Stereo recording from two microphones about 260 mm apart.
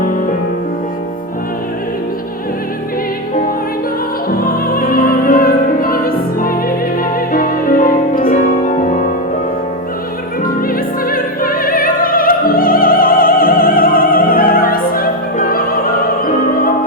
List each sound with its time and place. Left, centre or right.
4.3 s music: left
10.4 s music: left